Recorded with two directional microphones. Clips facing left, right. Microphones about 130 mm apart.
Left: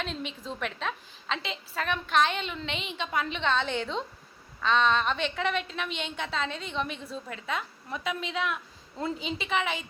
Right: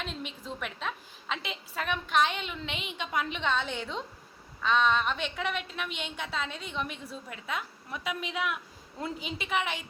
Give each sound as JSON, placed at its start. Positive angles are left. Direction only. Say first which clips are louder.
{"t": 0.4, "sound": "a woman's voice", "louder": "left 3 dB", "side_deg": -5}